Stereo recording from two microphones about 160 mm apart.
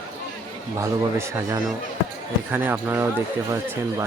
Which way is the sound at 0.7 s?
15° right (ahead or behind).